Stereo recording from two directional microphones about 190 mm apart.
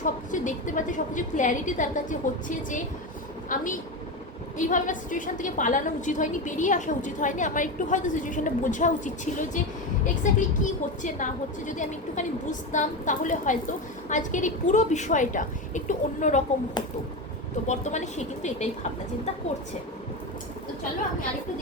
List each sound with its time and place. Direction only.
0.0 s a woman's voice: 40° left (ahead or behind)
17.7 s a woman's voice: 40° left (ahead or behind)